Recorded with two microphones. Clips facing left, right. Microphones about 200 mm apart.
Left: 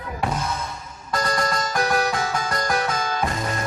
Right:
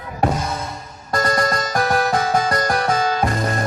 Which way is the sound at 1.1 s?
45° right (ahead or behind).